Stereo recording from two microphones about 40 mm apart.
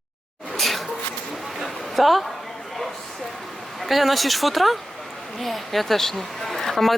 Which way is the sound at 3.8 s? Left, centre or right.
Centre.